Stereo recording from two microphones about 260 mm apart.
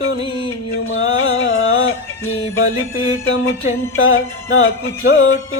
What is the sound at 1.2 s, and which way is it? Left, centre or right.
Music, left.